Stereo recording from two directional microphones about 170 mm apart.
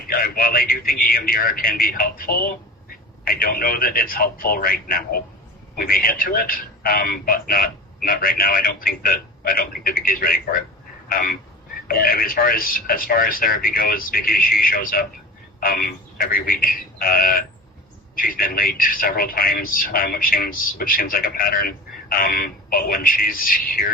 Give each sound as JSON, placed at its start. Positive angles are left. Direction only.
{"t": 0.1, "sound": "a man's voice", "side_deg": 60}